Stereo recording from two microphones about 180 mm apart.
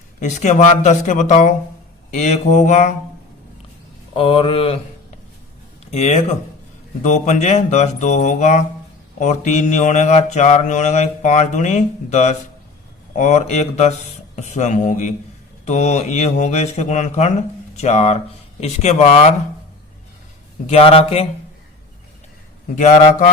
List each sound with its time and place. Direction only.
0.2 s speech: 40° left (ahead or behind)
2.0 s mantra: 40° left (ahead or behind)
4.1 s speech: 30° left (ahead or behind)
5.9 s mantra: 40° left (ahead or behind)
20.7 s mantra: 30° left (ahead or behind)
22.7 s mantra: 40° left (ahead or behind)